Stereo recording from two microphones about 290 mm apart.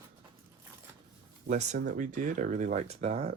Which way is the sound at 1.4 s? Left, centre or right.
Right.